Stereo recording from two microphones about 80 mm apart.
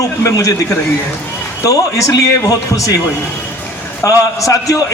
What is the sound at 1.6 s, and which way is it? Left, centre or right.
A man's voice, left.